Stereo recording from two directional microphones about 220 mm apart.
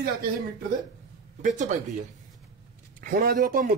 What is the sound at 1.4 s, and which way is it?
Speech, 35° right (ahead or behind).